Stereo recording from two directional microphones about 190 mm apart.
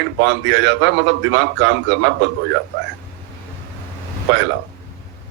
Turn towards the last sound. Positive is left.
turn(degrees=-65)  # may be behind; listen again after turning